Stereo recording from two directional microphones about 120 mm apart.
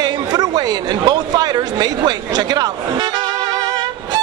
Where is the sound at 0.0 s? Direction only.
35° right (ahead or behind).